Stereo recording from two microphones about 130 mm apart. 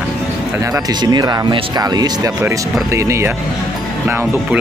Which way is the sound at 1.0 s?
30° right (ahead or behind).